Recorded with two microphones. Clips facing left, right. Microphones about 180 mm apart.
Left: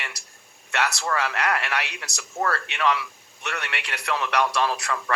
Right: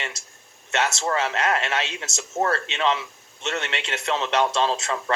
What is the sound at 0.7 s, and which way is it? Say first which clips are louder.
A man's voice: right 2 dB; 20° right (ahead or behind).